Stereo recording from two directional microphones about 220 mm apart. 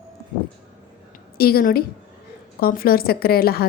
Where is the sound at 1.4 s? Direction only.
45° left (ahead or behind).